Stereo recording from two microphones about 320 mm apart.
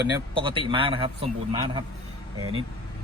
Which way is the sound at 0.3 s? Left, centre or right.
Centre.